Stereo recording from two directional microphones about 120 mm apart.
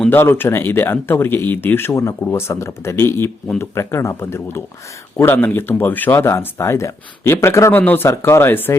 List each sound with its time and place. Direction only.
0.1 s speech: 20° left (ahead or behind)